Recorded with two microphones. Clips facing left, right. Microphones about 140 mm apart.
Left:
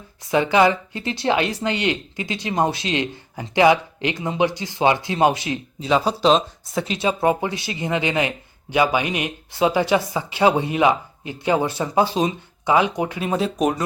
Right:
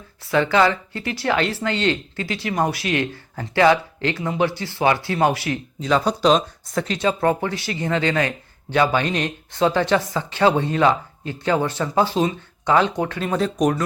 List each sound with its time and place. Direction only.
0.3 s speech: 15° left (ahead or behind)
5.9 s speech: 5° left (ahead or behind)
6.8 s speech: 15° left (ahead or behind)